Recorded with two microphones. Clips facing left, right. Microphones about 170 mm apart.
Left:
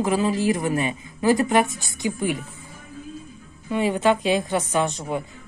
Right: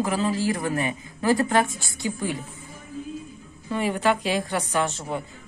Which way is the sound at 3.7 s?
20° left (ahead or behind).